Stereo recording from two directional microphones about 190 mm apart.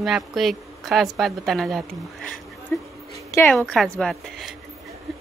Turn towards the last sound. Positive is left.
turn(degrees=0)  # may be behind; listen again after turning